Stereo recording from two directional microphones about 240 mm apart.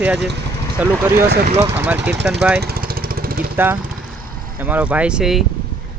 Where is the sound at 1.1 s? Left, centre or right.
Right.